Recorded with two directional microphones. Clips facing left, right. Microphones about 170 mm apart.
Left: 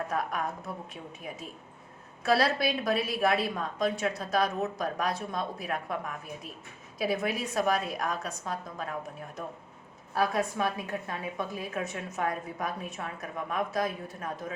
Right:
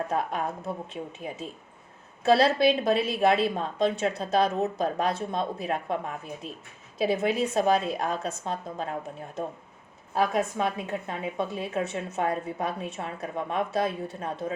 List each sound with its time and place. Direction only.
0.1 s a woman's voice: 25° right (ahead or behind)
2.2 s a woman's voice: 25° right (ahead or behind)